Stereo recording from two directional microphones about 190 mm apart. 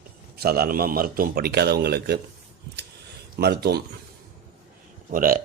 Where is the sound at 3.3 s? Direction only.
55° right (ahead or behind).